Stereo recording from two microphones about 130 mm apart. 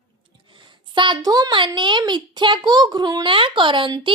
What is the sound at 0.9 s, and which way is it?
A woman's voice, 35° right (ahead or behind).